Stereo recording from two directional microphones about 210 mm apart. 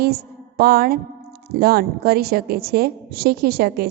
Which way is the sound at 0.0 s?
50° right (ahead or behind).